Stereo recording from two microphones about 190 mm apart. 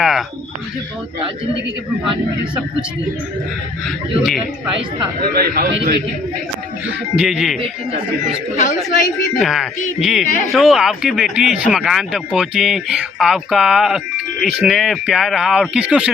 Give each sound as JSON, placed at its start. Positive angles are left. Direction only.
{"t": 0.0, "sound": "a sound", "side_deg": 0}
{"t": 3.8, "sound": "speech", "side_deg": 0}
{"t": 5.2, "sound": "a man's voice", "side_deg": -50}
{"t": 6.8, "sound": "speech", "side_deg": -5}
{"t": 9.4, "sound": "speech", "side_deg": 0}